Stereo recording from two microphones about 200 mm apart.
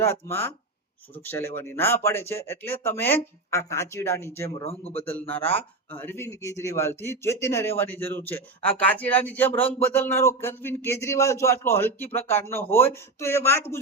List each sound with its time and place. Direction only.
0.0 s speech: 10° left (ahead or behind)
4.6 s speech: 30° left (ahead or behind)
5.3 s speech: 10° left (ahead or behind)